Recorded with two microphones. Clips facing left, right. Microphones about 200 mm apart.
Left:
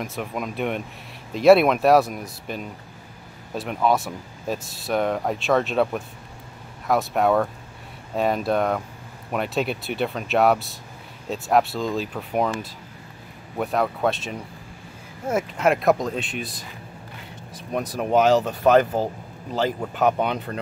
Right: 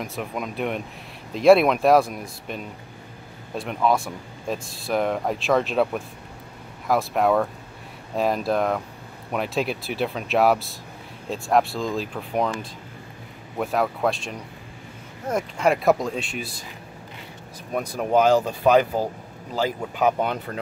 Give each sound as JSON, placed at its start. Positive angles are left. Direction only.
{"t": 0.0, "sound": "speech", "side_deg": 0}
{"t": 13.6, "sound": "speech", "side_deg": 0}
{"t": 17.7, "sound": "speech", "side_deg": 0}